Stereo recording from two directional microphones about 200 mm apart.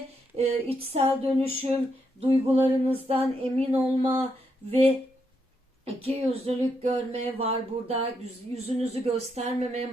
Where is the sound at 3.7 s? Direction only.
15° right (ahead or behind).